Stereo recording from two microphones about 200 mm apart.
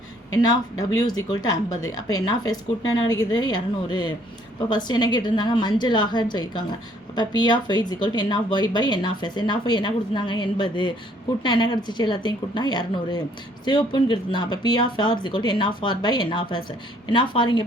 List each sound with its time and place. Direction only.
1.3 s a woman's voice: 20° left (ahead or behind)